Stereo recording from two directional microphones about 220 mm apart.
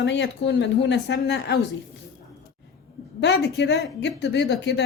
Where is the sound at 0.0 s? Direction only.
55° left (ahead or behind).